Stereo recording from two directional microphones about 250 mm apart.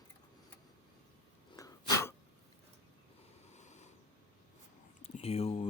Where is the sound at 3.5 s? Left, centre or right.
Left.